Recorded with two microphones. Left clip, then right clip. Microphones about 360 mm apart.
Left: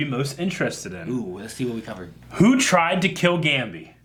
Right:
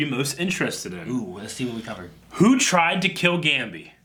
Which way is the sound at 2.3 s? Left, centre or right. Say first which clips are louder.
Left 1 dB; left.